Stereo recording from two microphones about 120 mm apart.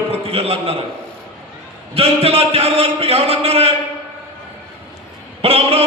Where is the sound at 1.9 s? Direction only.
55° right (ahead or behind).